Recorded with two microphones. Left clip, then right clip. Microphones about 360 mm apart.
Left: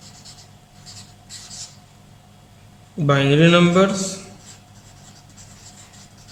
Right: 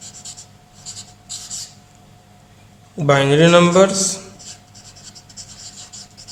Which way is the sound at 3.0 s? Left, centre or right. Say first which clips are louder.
Right 3 dB; centre.